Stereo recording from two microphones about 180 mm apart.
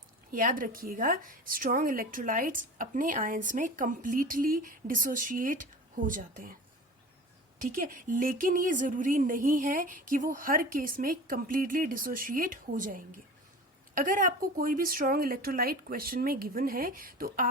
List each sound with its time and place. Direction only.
0.3 s a woman's voice: 50° right (ahead or behind)
7.6 s a woman's voice: 50° right (ahead or behind)